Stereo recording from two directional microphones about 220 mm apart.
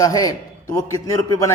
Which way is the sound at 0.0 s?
15° left (ahead or behind).